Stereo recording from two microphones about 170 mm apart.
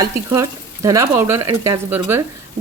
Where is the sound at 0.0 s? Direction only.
20° right (ahead or behind).